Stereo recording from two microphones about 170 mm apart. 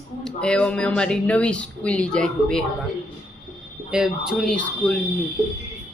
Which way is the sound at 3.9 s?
5° right (ahead or behind).